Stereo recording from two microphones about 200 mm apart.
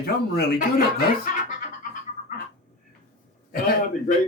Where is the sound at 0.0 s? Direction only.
50° left (ahead or behind).